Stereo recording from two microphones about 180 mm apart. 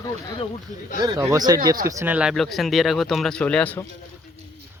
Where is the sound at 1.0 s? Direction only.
20° right (ahead or behind); by 3.9 s 10° left (ahead or behind).